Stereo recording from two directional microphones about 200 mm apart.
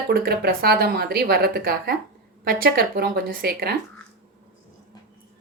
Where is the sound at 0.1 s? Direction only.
50° right (ahead or behind).